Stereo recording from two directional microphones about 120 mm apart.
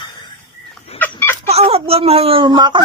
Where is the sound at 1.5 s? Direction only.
60° right (ahead or behind); by 2.8 s 40° right (ahead or behind).